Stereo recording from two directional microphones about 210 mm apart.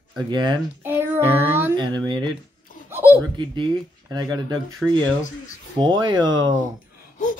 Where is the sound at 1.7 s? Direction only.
20° right (ahead or behind).